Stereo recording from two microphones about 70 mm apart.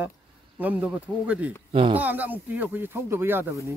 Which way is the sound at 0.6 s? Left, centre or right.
Centre.